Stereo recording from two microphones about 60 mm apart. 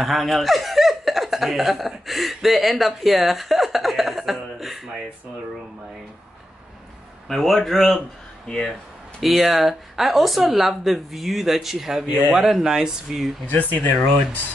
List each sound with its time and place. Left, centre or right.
0.0 s speech: centre
7.2 s a man's voice: centre
9.2 s speech: centre
13.5 s speech: left